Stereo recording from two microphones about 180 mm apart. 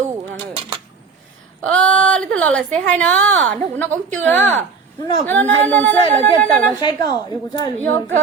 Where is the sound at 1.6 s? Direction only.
5° left (ahead or behind).